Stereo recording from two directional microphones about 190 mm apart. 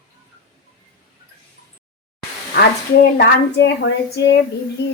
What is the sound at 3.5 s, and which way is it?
Speech, 70° left (ahead or behind).